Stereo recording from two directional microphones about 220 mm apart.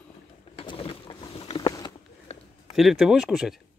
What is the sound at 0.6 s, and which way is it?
Boat, 25° left (ahead or behind).